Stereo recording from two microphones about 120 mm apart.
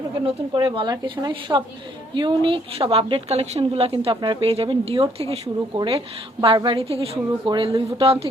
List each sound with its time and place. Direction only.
0.5 s a woman's voice: 40° right (ahead or behind)
5.7 s a woman's voice: 45° right (ahead or behind)